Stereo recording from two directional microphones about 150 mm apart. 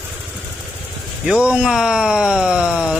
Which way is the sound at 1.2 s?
5° right (ahead or behind).